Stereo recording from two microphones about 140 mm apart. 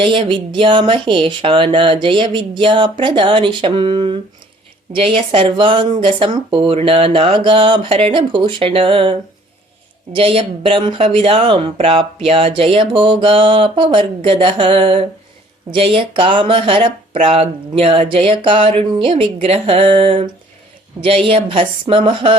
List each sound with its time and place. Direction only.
0.0 s speech: 35° right (ahead or behind)
21.2 s speech: 40° right (ahead or behind)